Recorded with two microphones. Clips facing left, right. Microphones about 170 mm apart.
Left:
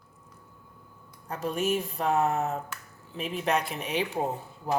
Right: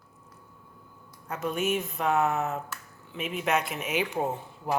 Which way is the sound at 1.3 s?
35° left (ahead or behind).